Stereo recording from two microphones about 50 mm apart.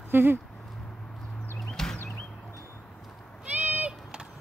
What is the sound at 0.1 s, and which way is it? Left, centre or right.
Speech, right.